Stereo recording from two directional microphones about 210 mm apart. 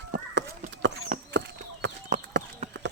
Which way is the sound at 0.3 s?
60° right (ahead or behind).